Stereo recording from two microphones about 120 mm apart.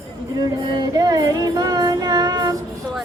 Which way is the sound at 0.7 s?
30° right (ahead or behind).